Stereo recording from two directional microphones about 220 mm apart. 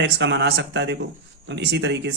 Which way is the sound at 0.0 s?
55° right (ahead or behind).